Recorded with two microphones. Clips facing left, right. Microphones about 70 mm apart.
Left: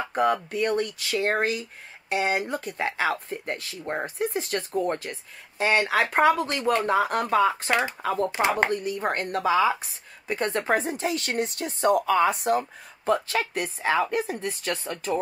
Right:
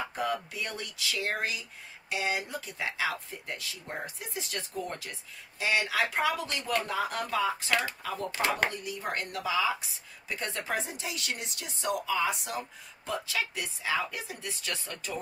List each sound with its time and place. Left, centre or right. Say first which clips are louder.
0.1 s a woman's voice: left 9 dB; left
8.3 s speech: left 3 dB; left
8.7 s a woman's voice: left 8 dB; left